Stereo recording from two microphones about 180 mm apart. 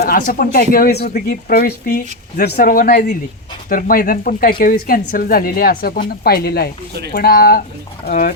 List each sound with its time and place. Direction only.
0.0 s a woman's voice: 50° left (ahead or behind)